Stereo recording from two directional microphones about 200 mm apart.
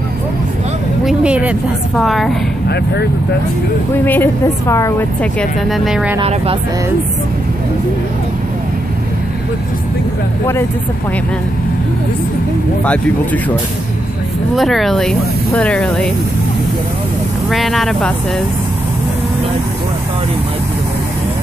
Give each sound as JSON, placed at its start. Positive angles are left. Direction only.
{"t": 1.0, "sound": "speech", "side_deg": -5}
{"t": 4.0, "sound": "a woman's voice", "side_deg": 10}
{"t": 6.1, "sound": "speech", "side_deg": -30}
{"t": 12.8, "sound": "a woman's voice", "side_deg": 5}
{"t": 14.5, "sound": "speech", "side_deg": 0}
{"t": 17.5, "sound": "speech", "side_deg": 0}